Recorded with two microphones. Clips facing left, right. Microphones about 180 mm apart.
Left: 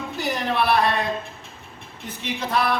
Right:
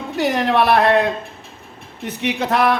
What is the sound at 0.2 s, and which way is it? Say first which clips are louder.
Speech: right 7 dB; 75° right (ahead or behind).